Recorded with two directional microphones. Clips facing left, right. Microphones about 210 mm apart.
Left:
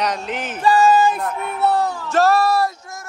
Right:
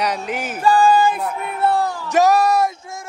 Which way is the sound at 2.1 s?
15° right (ahead or behind).